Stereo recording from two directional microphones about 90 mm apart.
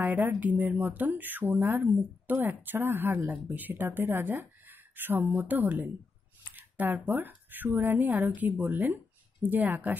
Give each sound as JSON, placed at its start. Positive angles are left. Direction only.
{"t": 0.0, "sound": "speech", "side_deg": -20}